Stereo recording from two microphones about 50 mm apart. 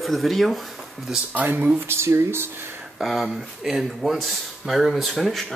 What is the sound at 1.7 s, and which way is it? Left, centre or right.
Speech, right.